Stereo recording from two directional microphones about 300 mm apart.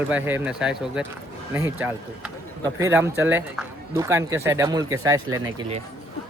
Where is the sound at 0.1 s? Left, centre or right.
Centre.